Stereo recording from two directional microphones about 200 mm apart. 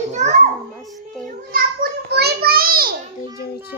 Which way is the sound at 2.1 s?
50° right (ahead or behind).